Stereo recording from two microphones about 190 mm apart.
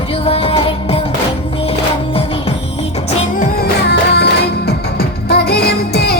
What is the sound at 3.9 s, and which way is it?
Music, 60° left (ahead or behind).